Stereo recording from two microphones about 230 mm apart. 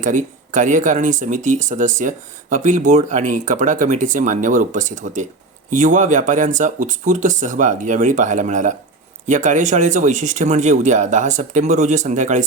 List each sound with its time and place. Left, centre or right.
0.0 s speech: right